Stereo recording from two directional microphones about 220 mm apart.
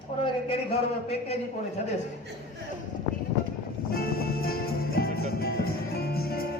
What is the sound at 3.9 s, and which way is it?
Music, 45° left (ahead or behind).